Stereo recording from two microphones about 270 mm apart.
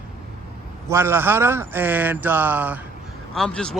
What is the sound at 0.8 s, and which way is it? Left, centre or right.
Speech, centre.